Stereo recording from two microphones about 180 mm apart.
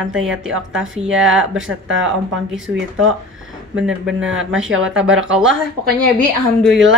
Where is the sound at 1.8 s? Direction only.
90° right.